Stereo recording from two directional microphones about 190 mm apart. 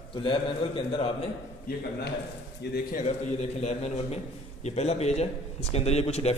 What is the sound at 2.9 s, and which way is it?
A man's voice, 40° left (ahead or behind).